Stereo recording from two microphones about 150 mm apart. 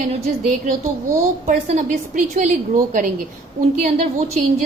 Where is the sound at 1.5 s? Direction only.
55° right (ahead or behind).